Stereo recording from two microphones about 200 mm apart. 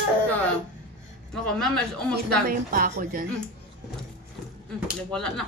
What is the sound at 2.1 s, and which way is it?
A woman's voice, 45° right (ahead or behind).